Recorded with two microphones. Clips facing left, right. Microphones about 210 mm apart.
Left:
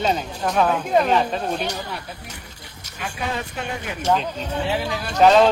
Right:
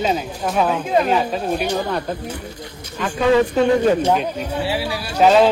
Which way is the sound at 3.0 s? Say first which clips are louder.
Right 13 dB; 75° right (ahead or behind).